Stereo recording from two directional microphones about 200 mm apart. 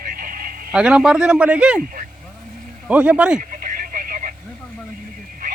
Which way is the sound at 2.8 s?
5° right (ahead or behind).